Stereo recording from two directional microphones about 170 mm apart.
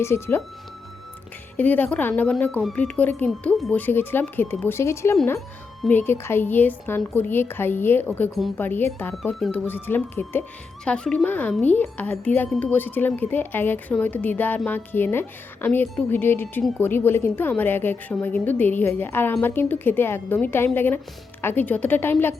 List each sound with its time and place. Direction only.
0.0 s speech: 15° left (ahead or behind)
1.5 s speech: 10° left (ahead or behind)